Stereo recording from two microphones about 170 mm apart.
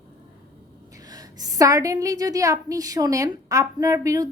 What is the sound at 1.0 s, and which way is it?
A woman's voice, 20° right (ahead or behind).